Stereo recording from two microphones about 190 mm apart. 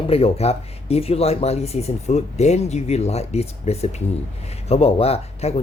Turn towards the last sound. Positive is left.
turn(degrees=35)  # may be behind; listen again after turning